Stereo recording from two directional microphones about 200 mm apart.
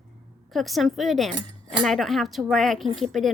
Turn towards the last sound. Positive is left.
turn(degrees=0)  # may be behind; listen again after turning